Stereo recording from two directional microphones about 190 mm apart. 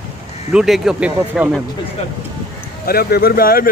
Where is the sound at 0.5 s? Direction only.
5° right (ahead or behind).